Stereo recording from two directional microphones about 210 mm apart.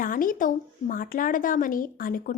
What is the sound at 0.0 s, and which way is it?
Speech, 40° left (ahead or behind).